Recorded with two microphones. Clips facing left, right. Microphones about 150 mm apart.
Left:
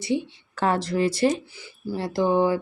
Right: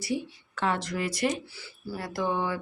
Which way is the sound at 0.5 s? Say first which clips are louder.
Left 6 dB; 40° left (ahead or behind).